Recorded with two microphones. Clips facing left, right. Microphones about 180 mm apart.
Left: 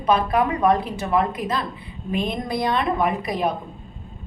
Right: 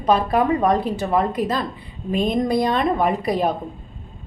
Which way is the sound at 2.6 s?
30° right (ahead or behind).